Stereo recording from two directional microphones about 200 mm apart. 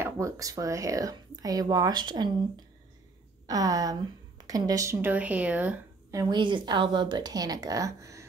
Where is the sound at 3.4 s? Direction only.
15° right (ahead or behind).